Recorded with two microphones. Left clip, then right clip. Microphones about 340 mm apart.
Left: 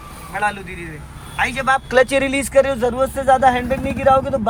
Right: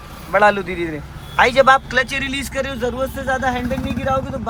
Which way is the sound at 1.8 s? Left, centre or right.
Centre.